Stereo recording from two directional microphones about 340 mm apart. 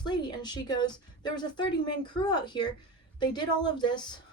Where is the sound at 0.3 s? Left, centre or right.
Centre.